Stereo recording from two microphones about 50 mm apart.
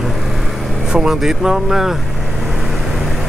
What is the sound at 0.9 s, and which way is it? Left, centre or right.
Speech, centre.